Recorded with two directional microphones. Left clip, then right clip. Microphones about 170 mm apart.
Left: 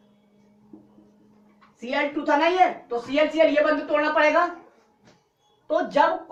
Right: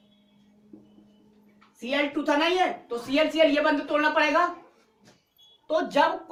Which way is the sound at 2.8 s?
25° right (ahead or behind).